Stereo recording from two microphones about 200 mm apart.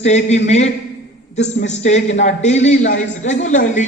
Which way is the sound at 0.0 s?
35° left (ahead or behind).